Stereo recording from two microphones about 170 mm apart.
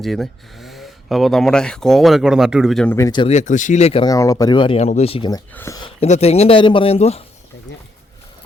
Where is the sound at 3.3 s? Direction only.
45° left (ahead or behind).